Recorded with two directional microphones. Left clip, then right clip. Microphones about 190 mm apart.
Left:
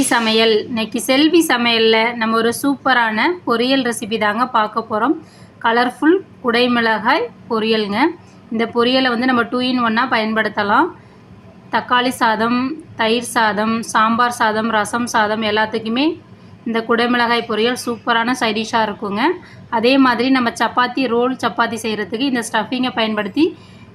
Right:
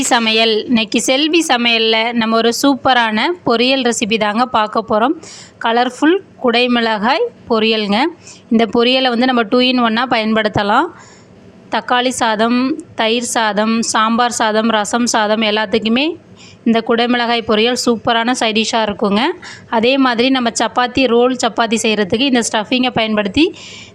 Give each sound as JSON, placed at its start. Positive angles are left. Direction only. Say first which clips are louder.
{"t": 0.1, "sound": "a woman's voice", "louder": "right 3 dB", "side_deg": -45}